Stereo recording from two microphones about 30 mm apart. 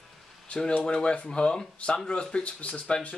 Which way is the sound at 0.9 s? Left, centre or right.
Left.